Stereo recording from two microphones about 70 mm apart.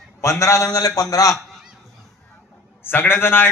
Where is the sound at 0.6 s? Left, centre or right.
Left.